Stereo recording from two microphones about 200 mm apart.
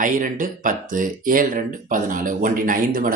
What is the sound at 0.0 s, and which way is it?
Speech, 40° right (ahead or behind).